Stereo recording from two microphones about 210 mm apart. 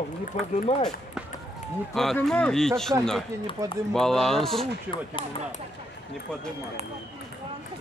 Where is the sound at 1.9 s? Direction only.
Centre (ahead or behind).